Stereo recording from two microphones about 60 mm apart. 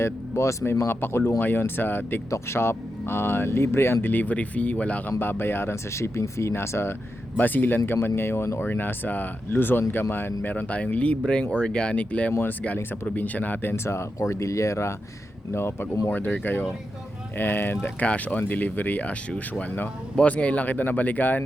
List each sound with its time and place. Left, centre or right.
0.0 s speech: left
0.9 s speech: left
4.1 s speech: left
5.2 s speech: left
7.3 s speech: left
8.0 s speech: left
10.5 s speech: left
13.8 s speech: left
15.5 s speech: left
16.0 s speech: left
18.0 s speech: left